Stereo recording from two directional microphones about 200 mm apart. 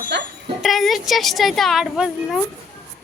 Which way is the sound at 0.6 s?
Centre (ahead or behind).